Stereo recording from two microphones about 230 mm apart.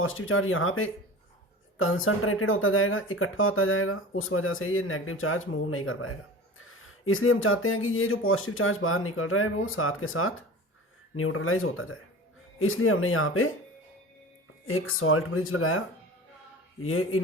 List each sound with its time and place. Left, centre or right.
0.0 s speech: left
14.7 s speech: left
16.8 s a man's voice: left